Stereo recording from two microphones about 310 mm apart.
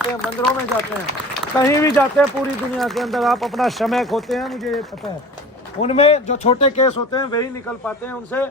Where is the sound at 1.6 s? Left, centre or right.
Centre.